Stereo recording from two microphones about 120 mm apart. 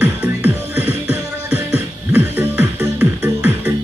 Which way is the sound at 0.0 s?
15° right (ahead or behind).